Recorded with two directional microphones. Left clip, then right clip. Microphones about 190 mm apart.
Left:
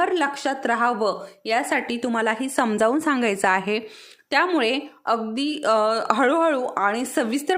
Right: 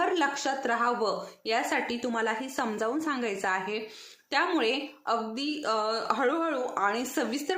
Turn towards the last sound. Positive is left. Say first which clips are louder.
# left 7 dB
turn(degrees=50)  # may be behind; listen again after turning